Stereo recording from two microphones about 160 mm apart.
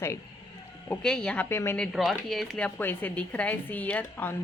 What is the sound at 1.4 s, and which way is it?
Speech, 15° left (ahead or behind).